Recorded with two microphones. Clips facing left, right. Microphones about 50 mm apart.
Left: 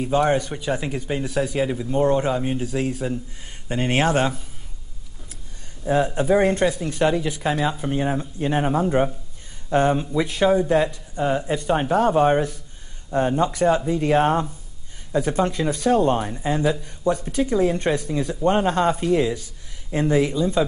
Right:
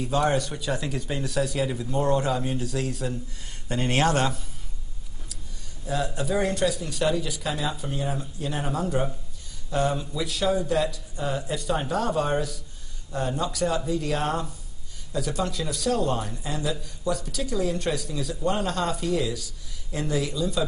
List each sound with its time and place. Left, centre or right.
0.1 s speech: left
5.9 s a man's voice: left